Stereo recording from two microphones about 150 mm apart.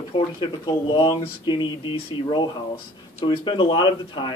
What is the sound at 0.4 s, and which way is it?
Speech, 30° left (ahead or behind).